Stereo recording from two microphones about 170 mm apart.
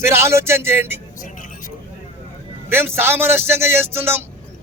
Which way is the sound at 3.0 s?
15° right (ahead or behind).